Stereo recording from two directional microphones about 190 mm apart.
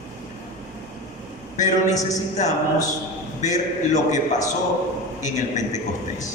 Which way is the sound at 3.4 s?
40° left (ahead or behind).